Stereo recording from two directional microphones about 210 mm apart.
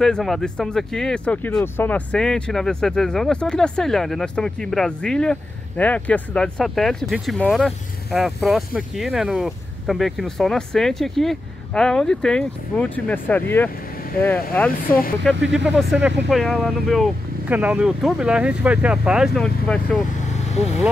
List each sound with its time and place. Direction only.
0.0 s speech: centre (ahead or behind)
15.5 s speech: 5° right (ahead or behind)
20.2 s vehicle: 30° left (ahead or behind)